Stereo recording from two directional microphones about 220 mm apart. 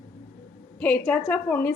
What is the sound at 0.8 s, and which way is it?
Speech, 5° left (ahead or behind).